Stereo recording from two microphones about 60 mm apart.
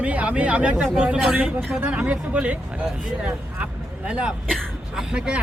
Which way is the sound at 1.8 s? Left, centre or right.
Right.